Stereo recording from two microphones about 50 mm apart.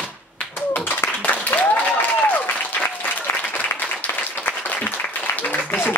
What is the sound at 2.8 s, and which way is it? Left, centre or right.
Applause, left.